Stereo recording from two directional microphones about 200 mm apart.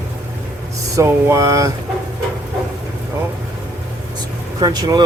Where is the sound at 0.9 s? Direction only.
15° right (ahead or behind).